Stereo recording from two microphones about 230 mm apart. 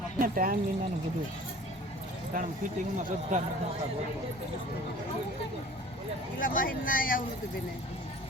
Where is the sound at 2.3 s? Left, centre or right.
Right.